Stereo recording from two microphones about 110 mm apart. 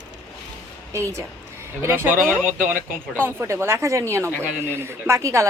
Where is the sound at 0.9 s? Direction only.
25° right (ahead or behind).